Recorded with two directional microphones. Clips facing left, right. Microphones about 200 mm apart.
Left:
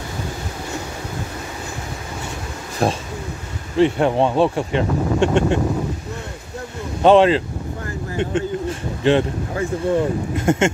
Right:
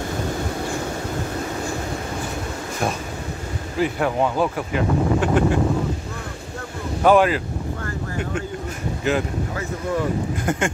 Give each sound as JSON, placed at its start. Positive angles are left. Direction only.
{"t": 2.8, "sound": "a sound", "side_deg": 35}
{"t": 3.7, "sound": "speech", "side_deg": 25}
{"t": 7.0, "sound": "speech", "side_deg": 25}